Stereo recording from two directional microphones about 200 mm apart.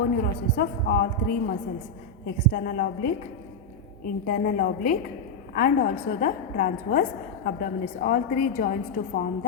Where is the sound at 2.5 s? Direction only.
50° left (ahead or behind).